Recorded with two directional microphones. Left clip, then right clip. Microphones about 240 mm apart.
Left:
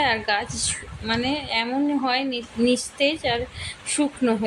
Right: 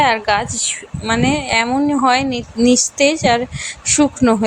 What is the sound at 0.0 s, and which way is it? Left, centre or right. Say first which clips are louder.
A woman's voice: right 8 dB; centre.